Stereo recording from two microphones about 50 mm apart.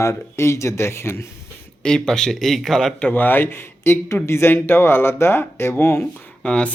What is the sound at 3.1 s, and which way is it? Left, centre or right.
A man's voice, left.